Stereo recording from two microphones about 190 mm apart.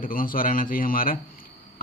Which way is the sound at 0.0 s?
45° left (ahead or behind).